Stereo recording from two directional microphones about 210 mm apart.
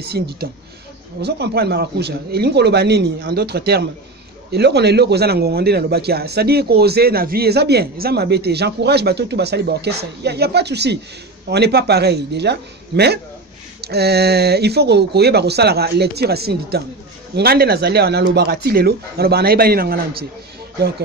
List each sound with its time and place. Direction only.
0.0 s a man's voice: 50° right (ahead or behind)